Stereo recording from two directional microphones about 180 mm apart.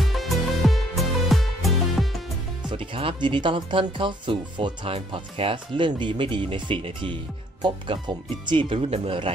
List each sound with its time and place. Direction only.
0.1 s music: centre (ahead or behind)
2.7 s speech: 30° right (ahead or behind)